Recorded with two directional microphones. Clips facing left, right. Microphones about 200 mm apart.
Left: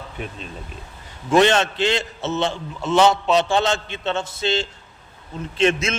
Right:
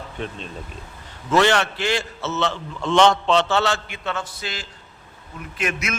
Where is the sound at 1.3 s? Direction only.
20° left (ahead or behind).